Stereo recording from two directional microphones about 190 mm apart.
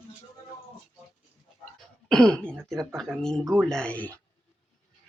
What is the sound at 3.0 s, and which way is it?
Speech, 5° left (ahead or behind).